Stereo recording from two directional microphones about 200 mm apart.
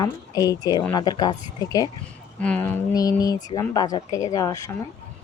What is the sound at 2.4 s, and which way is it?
Speech, 10° left (ahead or behind).